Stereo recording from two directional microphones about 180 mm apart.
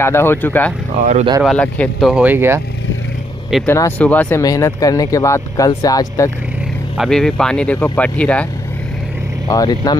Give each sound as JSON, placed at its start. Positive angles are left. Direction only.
{"t": 0.0, "sound": "speech", "side_deg": 15}
{"t": 3.6, "sound": "speech", "side_deg": 15}
{"t": 7.0, "sound": "speech", "side_deg": 5}
{"t": 9.5, "sound": "speech", "side_deg": 20}